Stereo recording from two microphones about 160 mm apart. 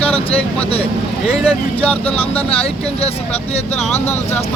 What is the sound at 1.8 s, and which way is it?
Speech, 10° left (ahead or behind).